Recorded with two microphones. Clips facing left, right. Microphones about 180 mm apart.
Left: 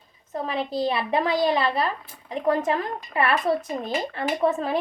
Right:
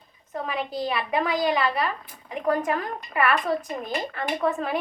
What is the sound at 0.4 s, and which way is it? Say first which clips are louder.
Speech: left 3 dB; 25° left (ahead or behind).